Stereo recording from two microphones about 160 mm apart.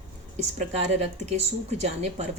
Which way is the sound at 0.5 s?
45° right (ahead or behind).